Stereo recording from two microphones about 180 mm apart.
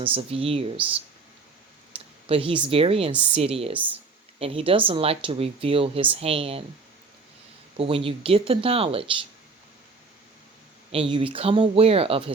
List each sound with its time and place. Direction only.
0.0 s speech: 30° right (ahead or behind)
2.2 s speech: 30° right (ahead or behind)
7.8 s speech: 30° right (ahead or behind)
10.9 s speech: 30° right (ahead or behind)